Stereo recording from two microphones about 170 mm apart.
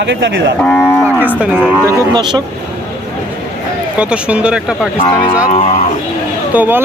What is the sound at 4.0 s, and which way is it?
Speech, 5° right (ahead or behind).